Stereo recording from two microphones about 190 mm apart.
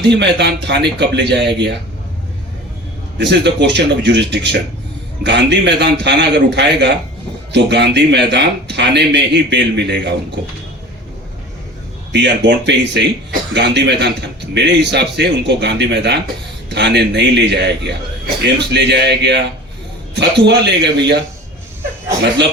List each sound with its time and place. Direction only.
0.1 s a man's voice: 65° right (ahead or behind)
3.2 s a man's voice: 65° right (ahead or behind)
12.1 s a man's voice: 65° right (ahead or behind)